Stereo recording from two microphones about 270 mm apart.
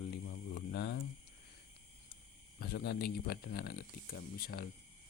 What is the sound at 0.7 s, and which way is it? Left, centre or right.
Hum, left.